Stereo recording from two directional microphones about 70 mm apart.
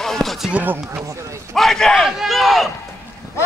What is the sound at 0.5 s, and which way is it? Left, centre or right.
Speech, right.